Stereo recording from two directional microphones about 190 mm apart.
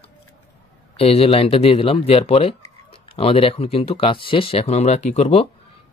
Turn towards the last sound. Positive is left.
turn(degrees=35)  # may be behind; listen again after turning